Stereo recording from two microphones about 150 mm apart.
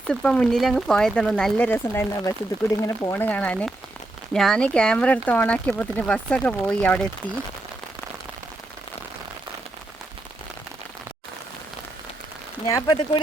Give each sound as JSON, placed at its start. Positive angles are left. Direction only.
{"t": 0.1, "sound": "speech", "side_deg": 5}
{"t": 12.6, "sound": "speech", "side_deg": 20}